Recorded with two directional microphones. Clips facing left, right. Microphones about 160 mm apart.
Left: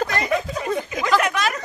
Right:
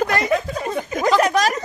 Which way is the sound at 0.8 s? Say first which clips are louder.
Right 3 dB; 45° right (ahead or behind).